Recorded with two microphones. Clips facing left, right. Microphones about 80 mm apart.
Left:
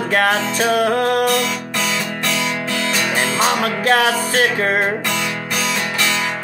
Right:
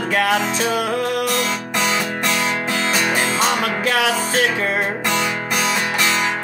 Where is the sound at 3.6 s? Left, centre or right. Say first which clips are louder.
Left 3 dB; left.